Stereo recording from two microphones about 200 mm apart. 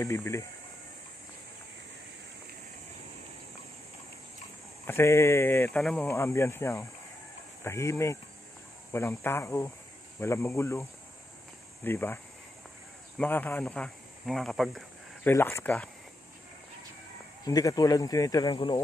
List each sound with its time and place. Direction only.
0.0 s speech: 15° left (ahead or behind)
4.8 s speech: 10° left (ahead or behind)
13.2 s speech: 10° left (ahead or behind)
17.5 s speech: 20° left (ahead or behind)